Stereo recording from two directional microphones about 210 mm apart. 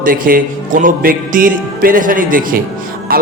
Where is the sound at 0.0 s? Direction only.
40° right (ahead or behind).